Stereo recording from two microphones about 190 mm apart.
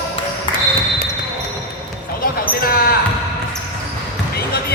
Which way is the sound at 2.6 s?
50° left (ahead or behind).